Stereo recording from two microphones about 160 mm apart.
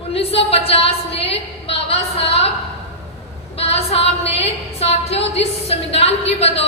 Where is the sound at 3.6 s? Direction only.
40° left (ahead or behind).